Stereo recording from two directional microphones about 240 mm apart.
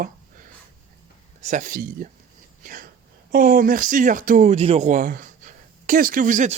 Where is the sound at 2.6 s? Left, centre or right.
Right.